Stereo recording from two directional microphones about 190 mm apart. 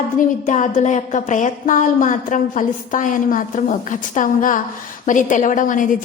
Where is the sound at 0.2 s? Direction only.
40° left (ahead or behind).